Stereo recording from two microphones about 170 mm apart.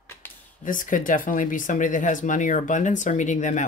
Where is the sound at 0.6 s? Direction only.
50° left (ahead or behind).